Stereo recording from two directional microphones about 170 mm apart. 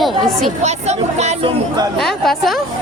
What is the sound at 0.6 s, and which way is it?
Speech, 40° right (ahead or behind).